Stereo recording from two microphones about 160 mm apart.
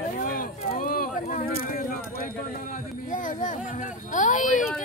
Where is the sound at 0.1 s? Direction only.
60° left (ahead or behind).